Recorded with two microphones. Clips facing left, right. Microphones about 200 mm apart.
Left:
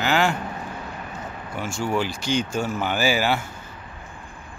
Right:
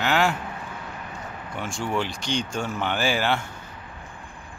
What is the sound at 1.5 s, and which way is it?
Speech, centre (ahead or behind).